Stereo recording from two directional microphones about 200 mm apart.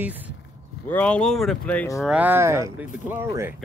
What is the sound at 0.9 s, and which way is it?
Speech, 5° left (ahead or behind).